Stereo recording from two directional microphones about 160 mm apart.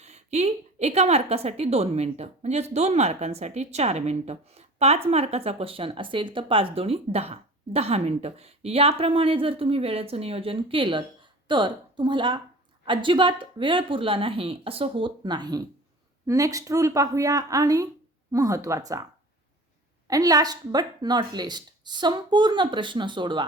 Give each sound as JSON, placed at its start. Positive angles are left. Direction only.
{"t": 0.0, "sound": "a woman's voice", "side_deg": -45}
{"t": 20.1, "sound": "speech", "side_deg": -20}